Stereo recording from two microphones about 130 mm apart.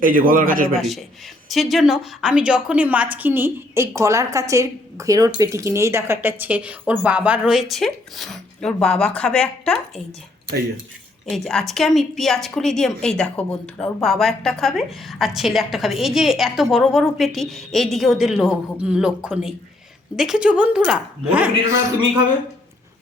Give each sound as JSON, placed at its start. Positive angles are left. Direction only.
{"t": 0.0, "sound": "a man's voice", "side_deg": -90}
{"t": 0.8, "sound": "a woman's voice", "side_deg": 0}
{"t": 11.3, "sound": "a woman's voice", "side_deg": 0}